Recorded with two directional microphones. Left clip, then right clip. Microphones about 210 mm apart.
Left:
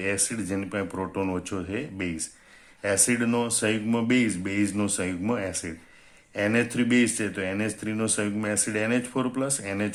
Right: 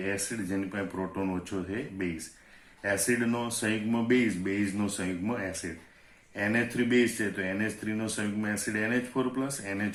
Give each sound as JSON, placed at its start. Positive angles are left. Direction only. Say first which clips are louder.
{"t": 0.0, "sound": "speech", "louder": "left 4 dB", "side_deg": 50}